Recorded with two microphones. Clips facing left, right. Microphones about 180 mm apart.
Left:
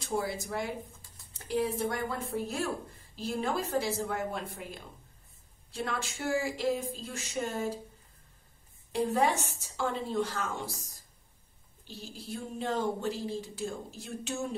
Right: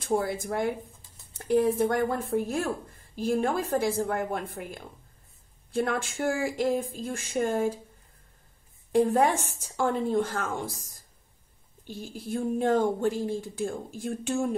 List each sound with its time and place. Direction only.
0.0 s speech: 55° right (ahead or behind)
8.9 s speech: 50° right (ahead or behind)
11.9 s speech: 50° right (ahead or behind)